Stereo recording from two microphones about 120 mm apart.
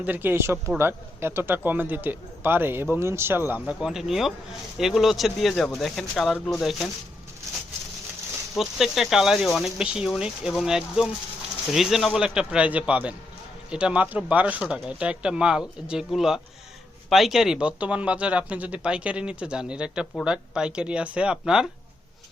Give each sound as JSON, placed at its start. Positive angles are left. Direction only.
{"t": 0.0, "sound": "a man's voice", "side_deg": -15}
{"t": 3.8, "sound": "speech", "side_deg": -5}
{"t": 8.5, "sound": "a man's voice", "side_deg": 0}